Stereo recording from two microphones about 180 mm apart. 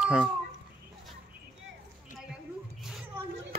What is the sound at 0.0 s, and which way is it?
Speech, 5° right (ahead or behind).